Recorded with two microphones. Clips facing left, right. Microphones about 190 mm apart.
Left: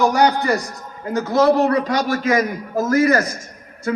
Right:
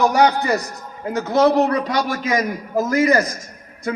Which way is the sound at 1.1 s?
20° right (ahead or behind).